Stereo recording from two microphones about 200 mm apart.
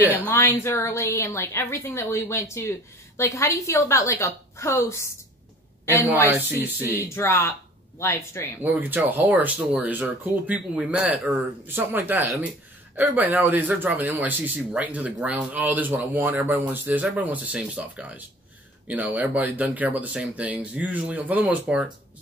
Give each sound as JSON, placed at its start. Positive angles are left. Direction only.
{"t": 0.0, "sound": "a man's voice", "side_deg": -10}
{"t": 0.3, "sound": "a woman's voice", "side_deg": 10}
{"t": 6.2, "sound": "a man's voice", "side_deg": -10}
{"t": 7.2, "sound": "a woman's voice", "side_deg": 15}
{"t": 8.6, "sound": "a man's voice", "side_deg": -10}